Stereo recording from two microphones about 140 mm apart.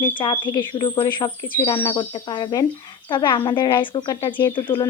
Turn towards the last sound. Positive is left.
turn(degrees=35)  # may be behind; listen again after turning